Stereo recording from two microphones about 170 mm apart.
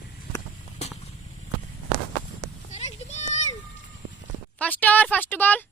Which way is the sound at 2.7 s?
40° left (ahead or behind).